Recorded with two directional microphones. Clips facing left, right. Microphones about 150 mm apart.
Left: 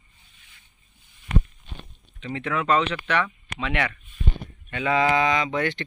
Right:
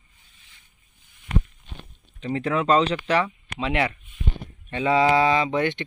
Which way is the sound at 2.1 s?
35° right (ahead or behind).